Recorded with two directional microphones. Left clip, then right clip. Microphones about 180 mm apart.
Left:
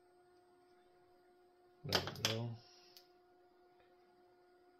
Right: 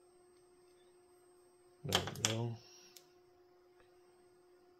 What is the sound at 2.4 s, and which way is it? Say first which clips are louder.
Computer keyboard: right 5 dB; 45° right (ahead or behind).